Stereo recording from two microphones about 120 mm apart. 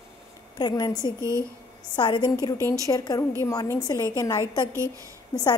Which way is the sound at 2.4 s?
25° left (ahead or behind).